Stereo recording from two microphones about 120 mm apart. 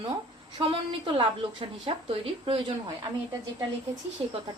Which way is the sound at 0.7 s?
50° right (ahead or behind).